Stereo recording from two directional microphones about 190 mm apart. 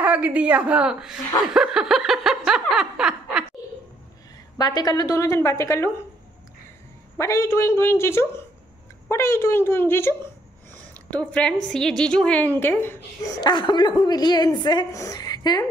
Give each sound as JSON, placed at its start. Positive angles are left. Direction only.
{"t": 0.0, "sound": "a woman's voice", "side_deg": -10}
{"t": 1.5, "sound": "a sound", "side_deg": -5}
{"t": 4.6, "sound": "a woman's voice", "side_deg": 20}
{"t": 7.2, "sound": "a woman's voice", "side_deg": 15}